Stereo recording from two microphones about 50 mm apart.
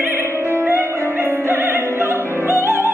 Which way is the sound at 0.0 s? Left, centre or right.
Right.